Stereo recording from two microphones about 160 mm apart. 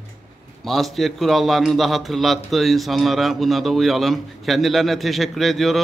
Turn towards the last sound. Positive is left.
turn(degrees=0)  # may be behind; listen again after turning